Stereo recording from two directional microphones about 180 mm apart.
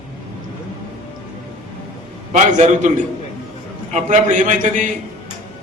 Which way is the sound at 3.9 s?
45° right (ahead or behind).